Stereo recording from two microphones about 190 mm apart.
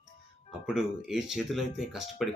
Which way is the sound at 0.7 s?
Centre (ahead or behind).